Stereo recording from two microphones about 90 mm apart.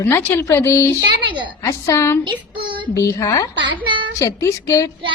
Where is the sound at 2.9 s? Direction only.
35° left (ahead or behind).